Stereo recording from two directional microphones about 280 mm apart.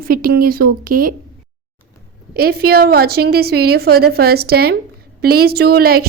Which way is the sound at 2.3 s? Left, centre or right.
Right.